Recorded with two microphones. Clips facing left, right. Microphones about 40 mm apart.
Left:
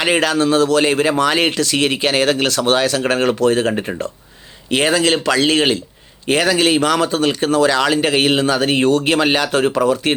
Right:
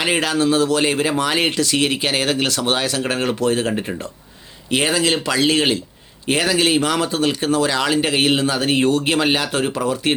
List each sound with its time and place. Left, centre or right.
0.2 s speech: left
3.7 s speech: centre
4.7 s speech: left